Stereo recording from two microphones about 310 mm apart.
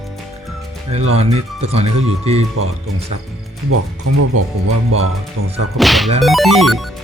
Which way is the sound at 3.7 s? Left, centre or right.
Right.